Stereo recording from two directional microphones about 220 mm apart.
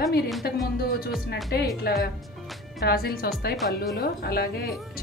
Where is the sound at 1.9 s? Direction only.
45° left (ahead or behind).